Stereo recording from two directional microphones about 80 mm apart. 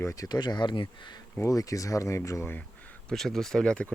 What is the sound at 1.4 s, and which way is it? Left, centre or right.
Speech, left.